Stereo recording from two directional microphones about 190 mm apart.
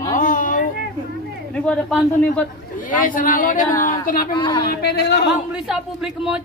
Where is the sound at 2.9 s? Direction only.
45° left (ahead or behind).